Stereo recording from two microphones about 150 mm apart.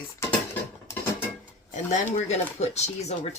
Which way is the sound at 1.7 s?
50° left (ahead or behind).